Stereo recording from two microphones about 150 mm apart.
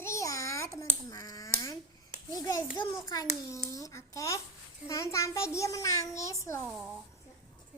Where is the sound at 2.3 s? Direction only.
20° left (ahead or behind).